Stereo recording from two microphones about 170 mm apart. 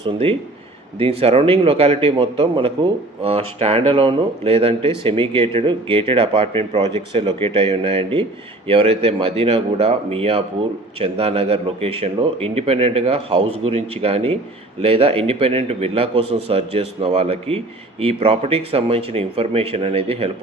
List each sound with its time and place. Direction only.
0.0 s a man's voice: 35° right (ahead or behind)